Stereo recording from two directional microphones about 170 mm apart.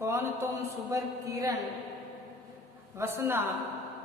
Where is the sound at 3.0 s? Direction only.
15° right (ahead or behind).